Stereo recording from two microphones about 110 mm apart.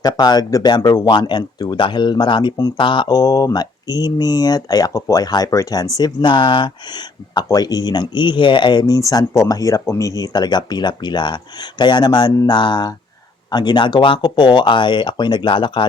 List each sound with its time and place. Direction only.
0.0 s speech: 40° left (ahead or behind)